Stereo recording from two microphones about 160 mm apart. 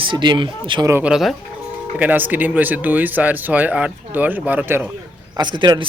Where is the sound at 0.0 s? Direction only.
30° right (ahead or behind).